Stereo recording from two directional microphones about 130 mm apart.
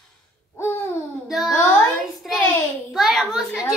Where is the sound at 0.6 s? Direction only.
20° left (ahead or behind).